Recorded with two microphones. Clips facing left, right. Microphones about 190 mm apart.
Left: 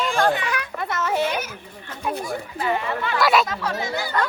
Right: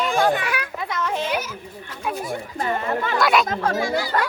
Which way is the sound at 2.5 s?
45° right (ahead or behind).